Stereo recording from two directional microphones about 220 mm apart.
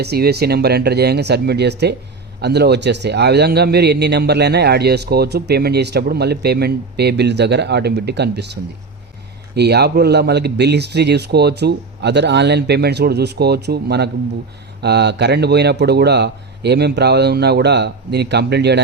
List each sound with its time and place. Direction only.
0.0 s a man's voice: 45° right (ahead or behind)
9.6 s a man's voice: 50° right (ahead or behind)